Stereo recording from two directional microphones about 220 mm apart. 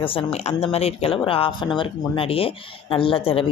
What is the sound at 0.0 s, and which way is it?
Speech, 25° left (ahead or behind).